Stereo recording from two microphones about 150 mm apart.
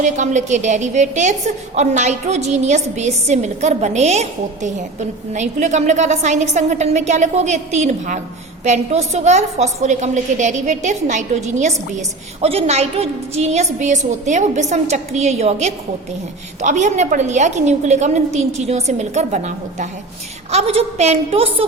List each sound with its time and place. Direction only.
0.0 s a woman's voice: 55° right (ahead or behind)
20.5 s a woman's voice: 45° right (ahead or behind)